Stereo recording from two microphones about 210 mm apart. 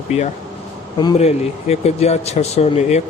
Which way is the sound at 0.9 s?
20° left (ahead or behind).